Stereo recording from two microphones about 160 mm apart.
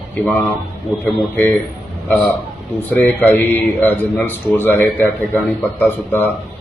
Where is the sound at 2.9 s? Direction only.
10° left (ahead or behind).